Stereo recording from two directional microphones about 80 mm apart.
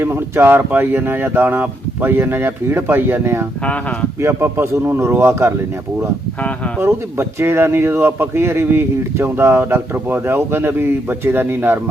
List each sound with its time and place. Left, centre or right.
0.0 s speech: right
6.7 s speech: right